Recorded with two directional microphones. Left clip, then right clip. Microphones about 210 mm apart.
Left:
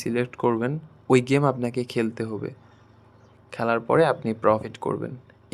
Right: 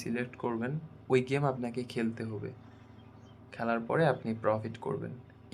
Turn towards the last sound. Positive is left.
turn(degrees=45)  # may be behind; listen again after turning